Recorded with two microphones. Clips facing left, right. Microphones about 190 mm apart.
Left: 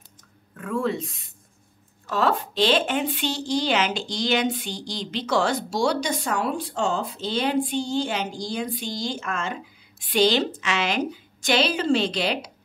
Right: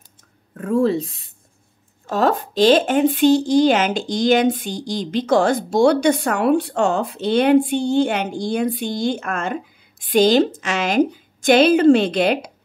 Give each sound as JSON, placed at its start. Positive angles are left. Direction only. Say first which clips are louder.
{"t": 0.6, "sound": "speech", "louder": "right 8 dB", "side_deg": -40}
{"t": 2.0, "sound": "a woman's voice", "louder": "right 5 dB", "side_deg": -45}